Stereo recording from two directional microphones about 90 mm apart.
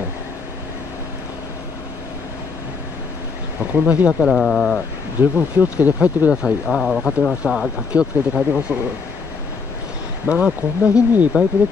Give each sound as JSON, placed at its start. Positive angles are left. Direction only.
{"t": 3.7, "sound": "speech", "side_deg": -15}
{"t": 4.1, "sound": "speech", "side_deg": 0}
{"t": 5.2, "sound": "speech", "side_deg": -20}
{"t": 10.2, "sound": "speech", "side_deg": -15}